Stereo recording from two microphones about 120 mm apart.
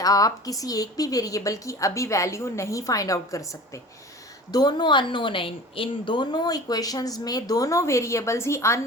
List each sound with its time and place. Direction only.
0.0 s a woman's voice: 30° left (ahead or behind)
4.5 s a woman's voice: 35° left (ahead or behind)